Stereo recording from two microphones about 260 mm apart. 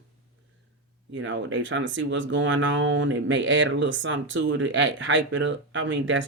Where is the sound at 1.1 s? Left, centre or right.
Right.